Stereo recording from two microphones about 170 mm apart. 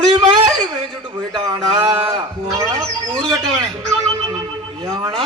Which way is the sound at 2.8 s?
5° left (ahead or behind).